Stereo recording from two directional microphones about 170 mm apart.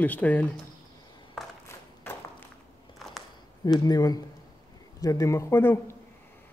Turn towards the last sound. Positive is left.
turn(degrees=15)  # may be behind; listen again after turning